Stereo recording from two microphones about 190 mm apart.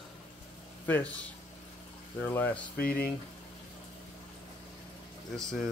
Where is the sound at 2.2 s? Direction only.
10° left (ahead or behind).